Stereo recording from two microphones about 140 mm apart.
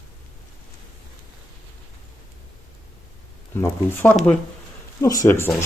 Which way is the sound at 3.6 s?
15° left (ahead or behind).